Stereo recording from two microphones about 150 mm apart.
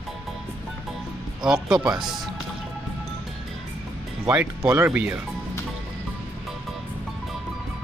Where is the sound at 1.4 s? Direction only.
5° right (ahead or behind).